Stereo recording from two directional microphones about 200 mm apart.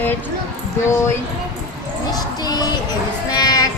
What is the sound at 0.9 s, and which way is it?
Speech, 10° left (ahead or behind).